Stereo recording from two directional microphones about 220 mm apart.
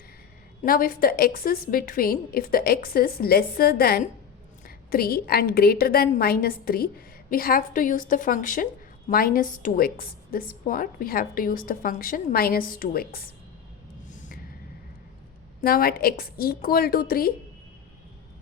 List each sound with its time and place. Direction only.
0.6 s a woman's voice: 40° left (ahead or behind)
15.6 s a woman's voice: 40° left (ahead or behind)